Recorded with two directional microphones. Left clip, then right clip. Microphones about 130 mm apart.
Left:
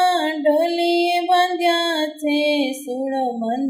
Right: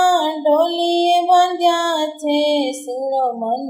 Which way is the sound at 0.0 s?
40° left (ahead or behind).